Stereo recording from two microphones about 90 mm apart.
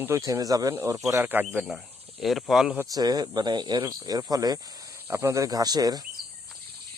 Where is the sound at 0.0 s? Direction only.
35° right (ahead or behind).